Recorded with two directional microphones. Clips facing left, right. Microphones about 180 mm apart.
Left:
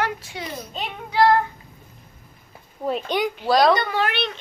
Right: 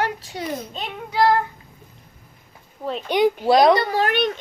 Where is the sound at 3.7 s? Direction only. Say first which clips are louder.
Right 3 dB; 35° right (ahead or behind).